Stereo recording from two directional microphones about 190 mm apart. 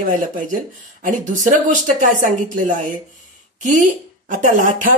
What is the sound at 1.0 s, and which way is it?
Speech, 45° right (ahead or behind).